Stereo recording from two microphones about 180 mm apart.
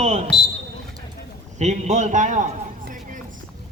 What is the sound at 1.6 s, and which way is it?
Speech, 40° right (ahead or behind).